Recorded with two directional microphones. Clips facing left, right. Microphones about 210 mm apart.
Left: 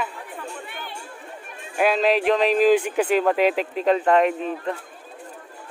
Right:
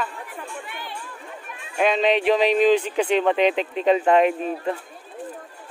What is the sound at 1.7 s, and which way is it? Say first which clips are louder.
Speech: even; 5° left (ahead or behind).